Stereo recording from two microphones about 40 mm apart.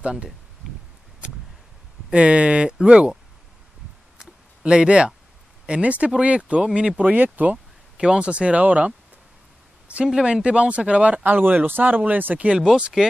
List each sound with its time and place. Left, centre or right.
2.0 s speech: right
4.2 s a sound: right
5.7 s speech: right
6.6 s speech: centre
7.0 s speech: right
8.0 s speech: right
9.9 s a sound: right
10.2 s speech: right
11.2 s speech: right
12.5 s speech: right